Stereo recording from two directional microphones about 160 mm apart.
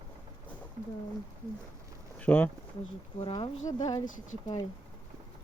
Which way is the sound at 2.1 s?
10° left (ahead or behind).